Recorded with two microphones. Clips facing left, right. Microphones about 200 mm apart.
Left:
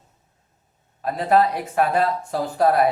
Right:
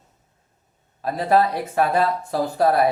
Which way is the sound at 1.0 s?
35° right (ahead or behind).